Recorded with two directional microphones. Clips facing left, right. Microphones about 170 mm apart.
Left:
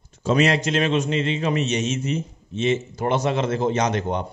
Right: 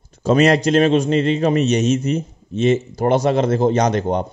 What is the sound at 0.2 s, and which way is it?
A man's voice, 45° right (ahead or behind).